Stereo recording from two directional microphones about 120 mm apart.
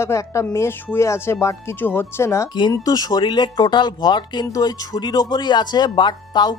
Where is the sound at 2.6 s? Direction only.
35° left (ahead or behind).